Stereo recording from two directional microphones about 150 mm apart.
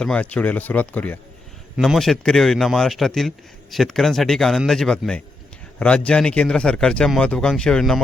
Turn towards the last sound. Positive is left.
turn(degrees=5)  # may be behind; listen again after turning